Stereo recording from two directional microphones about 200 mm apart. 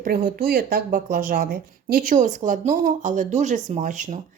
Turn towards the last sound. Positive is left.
turn(degrees=-40)  # may be behind; listen again after turning